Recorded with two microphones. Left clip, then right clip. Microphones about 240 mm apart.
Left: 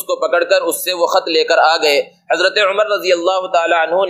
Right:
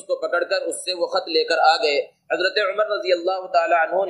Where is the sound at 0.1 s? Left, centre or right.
Left.